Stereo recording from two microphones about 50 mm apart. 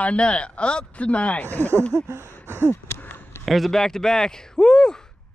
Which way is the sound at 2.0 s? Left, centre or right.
Right.